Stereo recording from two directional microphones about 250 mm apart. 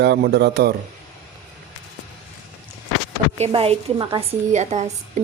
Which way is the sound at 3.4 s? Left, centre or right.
Right.